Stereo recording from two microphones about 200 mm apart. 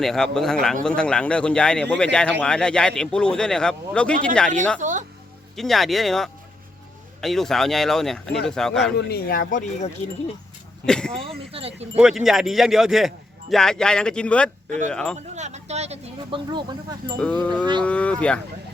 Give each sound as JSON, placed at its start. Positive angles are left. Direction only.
{"t": 0.0, "sound": "speech", "side_deg": 0}
{"t": 4.8, "sound": "speech", "side_deg": -40}
{"t": 5.5, "sound": "speech", "side_deg": 0}
{"t": 9.0, "sound": "speech", "side_deg": 50}
{"t": 10.8, "sound": "speech", "side_deg": 5}
{"t": 11.5, "sound": "speech", "side_deg": -30}
{"t": 11.9, "sound": "speech", "side_deg": -5}
{"t": 15.4, "sound": "speech", "side_deg": -35}
{"t": 17.2, "sound": "speech", "side_deg": 5}